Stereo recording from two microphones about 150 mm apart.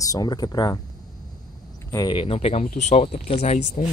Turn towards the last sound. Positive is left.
turn(degrees=50)  # may be behind; listen again after turning